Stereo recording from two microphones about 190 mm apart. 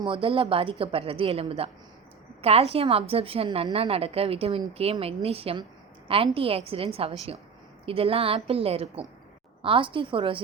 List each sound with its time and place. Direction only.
0.0 s a woman's voice: 25° right (ahead or behind)